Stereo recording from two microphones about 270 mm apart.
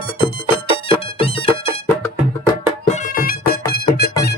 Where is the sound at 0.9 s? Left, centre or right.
Centre.